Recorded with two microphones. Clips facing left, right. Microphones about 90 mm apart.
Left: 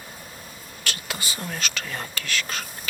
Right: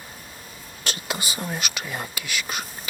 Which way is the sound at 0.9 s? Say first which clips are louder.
Right 2 dB; 20° right (ahead or behind).